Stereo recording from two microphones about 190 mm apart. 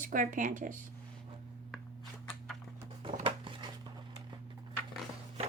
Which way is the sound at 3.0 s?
30° right (ahead or behind).